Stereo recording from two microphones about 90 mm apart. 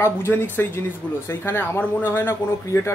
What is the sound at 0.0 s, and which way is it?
Speech, 25° left (ahead or behind).